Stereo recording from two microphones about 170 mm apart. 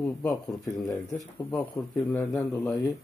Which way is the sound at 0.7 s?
15° left (ahead or behind).